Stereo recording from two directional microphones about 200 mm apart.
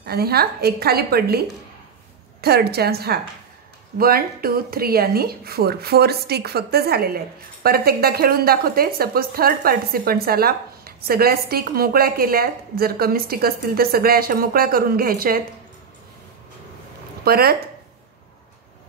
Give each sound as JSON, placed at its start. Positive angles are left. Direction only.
{"t": 0.0, "sound": "a woman's voice", "side_deg": -50}
{"t": 2.4, "sound": "a woman's voice", "side_deg": -50}
{"t": 17.2, "sound": "speech", "side_deg": -50}